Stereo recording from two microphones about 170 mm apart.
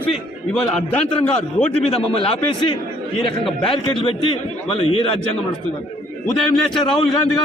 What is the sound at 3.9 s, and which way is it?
A man's voice, 30° left (ahead or behind).